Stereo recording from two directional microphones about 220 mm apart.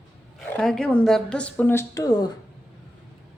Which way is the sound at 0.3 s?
Centre (ahead or behind).